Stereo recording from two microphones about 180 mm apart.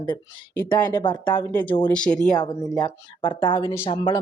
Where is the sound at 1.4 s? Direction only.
10° left (ahead or behind).